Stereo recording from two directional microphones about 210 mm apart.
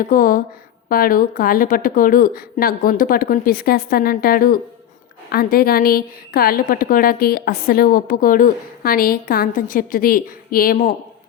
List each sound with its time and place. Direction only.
0.0 s a woman's voice: 40° left (ahead or behind)